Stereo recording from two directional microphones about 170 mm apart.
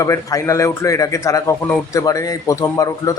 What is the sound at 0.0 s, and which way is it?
Speech, 20° left (ahead or behind).